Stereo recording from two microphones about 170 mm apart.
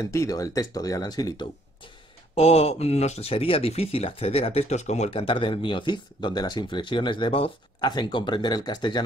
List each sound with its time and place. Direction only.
0.0 s speech: 20° left (ahead or behind)
2.3 s speech: 40° left (ahead or behind)